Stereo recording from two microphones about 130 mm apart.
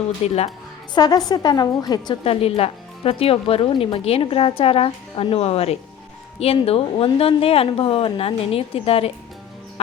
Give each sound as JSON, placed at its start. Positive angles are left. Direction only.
{"t": 0.2, "sound": "speech", "side_deg": 55}
{"t": 0.9, "sound": "a woman's voice", "side_deg": 30}
{"t": 2.2, "sound": "speech", "side_deg": 50}